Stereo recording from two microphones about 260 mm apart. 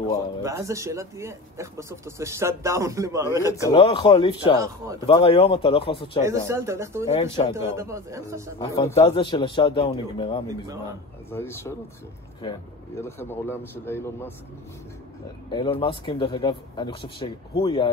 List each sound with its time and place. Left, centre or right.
0.4 s speech: centre
3.6 s a man's voice: centre
6.2 s speech: centre
7.2 s speech: centre
7.7 s speech: centre
8.5 s a man's voice: centre
15.5 s speech: centre